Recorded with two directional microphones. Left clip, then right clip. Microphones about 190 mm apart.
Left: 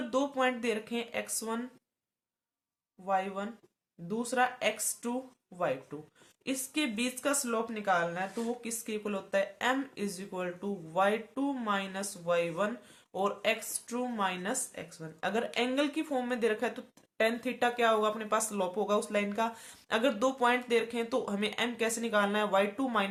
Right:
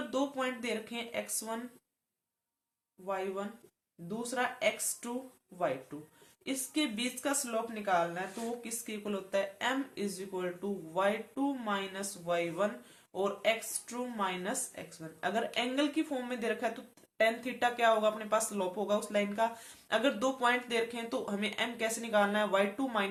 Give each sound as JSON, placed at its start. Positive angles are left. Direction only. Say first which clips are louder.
{"t": 0.1, "sound": "speech", "louder": "left 5 dB", "side_deg": 35}
{"t": 3.1, "sound": "speech", "louder": "left 4 dB", "side_deg": 40}
{"t": 6.4, "sound": "speech", "louder": "left 1 dB", "side_deg": 40}